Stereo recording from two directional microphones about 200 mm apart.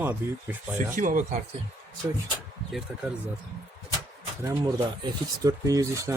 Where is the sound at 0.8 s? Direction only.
40° right (ahead or behind).